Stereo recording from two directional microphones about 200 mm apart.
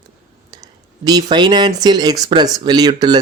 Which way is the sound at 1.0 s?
20° right (ahead or behind).